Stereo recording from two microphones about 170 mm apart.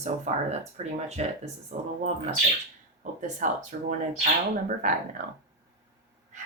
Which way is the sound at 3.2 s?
45° right (ahead or behind).